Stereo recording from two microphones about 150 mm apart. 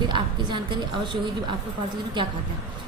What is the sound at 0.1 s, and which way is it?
A woman's voice, 30° right (ahead or behind).